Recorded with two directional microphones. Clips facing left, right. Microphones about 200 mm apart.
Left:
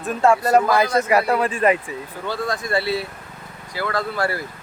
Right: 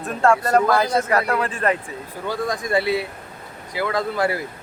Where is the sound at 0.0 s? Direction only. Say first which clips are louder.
Left 1 dB; 5° left (ahead or behind).